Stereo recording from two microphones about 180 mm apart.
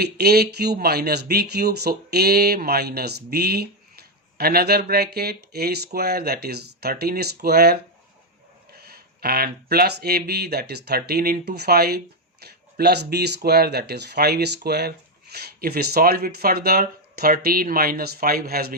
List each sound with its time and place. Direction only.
0.0 s speech: 60° right (ahead or behind)
8.8 s speech: 60° right (ahead or behind)